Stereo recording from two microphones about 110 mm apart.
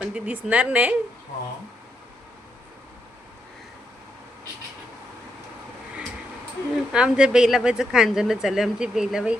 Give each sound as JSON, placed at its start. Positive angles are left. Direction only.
{"t": 0.0, "sound": "a woman's voice", "side_deg": -10}
{"t": 6.9, "sound": "speech", "side_deg": -5}